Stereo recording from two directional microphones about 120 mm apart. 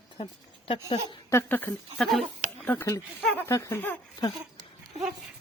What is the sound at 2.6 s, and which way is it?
A child's voice, 15° left (ahead or behind).